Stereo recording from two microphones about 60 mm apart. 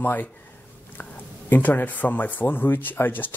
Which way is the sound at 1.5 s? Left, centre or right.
Left.